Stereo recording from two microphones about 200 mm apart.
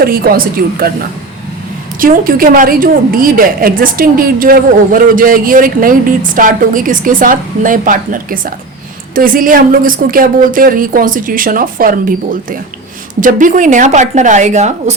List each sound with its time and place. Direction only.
0.0 s a woman's voice: 45° right (ahead or behind)
2.0 s a woman's voice: 45° right (ahead or behind)